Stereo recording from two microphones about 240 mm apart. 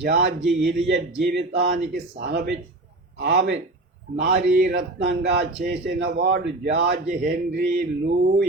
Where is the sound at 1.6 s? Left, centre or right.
Right.